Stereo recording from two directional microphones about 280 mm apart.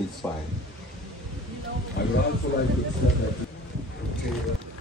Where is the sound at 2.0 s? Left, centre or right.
Left.